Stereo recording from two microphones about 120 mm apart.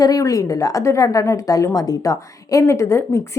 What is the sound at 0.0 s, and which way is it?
A woman's voice, 30° left (ahead or behind).